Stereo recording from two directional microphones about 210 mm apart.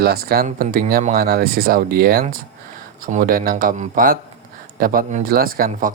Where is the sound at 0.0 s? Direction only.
45° right (ahead or behind).